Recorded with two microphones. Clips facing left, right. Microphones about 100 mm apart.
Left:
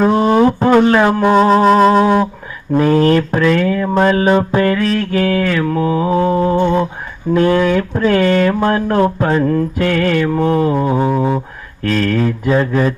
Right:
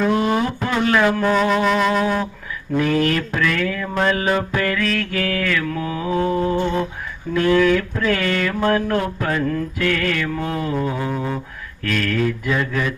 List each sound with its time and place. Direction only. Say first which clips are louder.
0.0 s music: left 7 dB; 30° left (ahead or behind)
2.7 s speech: left 7 dB; 35° left (ahead or behind)